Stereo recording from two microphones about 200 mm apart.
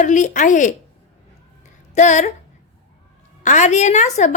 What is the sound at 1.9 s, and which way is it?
Speech, 35° left (ahead or behind).